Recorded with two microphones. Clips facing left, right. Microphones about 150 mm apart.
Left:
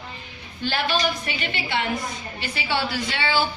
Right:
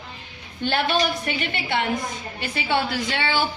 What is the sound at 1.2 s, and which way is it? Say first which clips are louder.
A woman's voice: right 2 dB; 55° right (ahead or behind).